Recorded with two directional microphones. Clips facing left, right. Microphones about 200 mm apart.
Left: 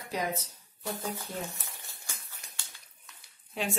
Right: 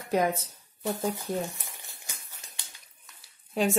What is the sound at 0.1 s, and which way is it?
Speech, 50° right (ahead or behind).